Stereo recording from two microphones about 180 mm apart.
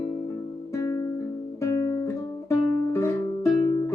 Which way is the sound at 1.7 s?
20° left (ahead or behind).